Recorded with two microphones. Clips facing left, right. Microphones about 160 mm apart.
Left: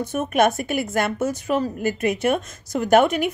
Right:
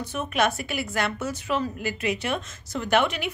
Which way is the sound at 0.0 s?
50° left (ahead or behind).